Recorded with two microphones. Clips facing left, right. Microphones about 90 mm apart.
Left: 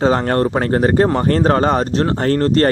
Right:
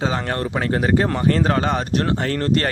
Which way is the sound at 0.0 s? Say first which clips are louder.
Left 8 dB; 40° left (ahead or behind).